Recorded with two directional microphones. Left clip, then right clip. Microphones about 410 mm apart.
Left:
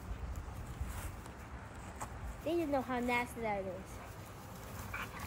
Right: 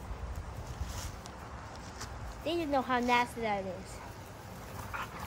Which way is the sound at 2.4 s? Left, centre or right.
Right.